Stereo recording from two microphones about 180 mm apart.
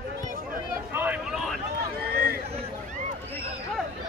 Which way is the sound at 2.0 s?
60° right (ahead or behind).